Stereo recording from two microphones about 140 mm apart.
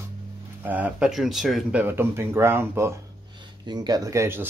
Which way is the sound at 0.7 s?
10° right (ahead or behind).